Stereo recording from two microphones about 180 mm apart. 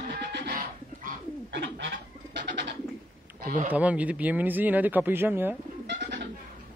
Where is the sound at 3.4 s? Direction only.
50° right (ahead or behind).